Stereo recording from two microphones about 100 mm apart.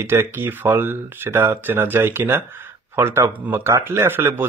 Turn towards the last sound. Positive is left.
turn(degrees=-20)  # may be behind; listen again after turning